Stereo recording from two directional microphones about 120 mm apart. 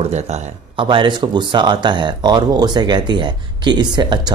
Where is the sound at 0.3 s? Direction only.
65° right (ahead or behind).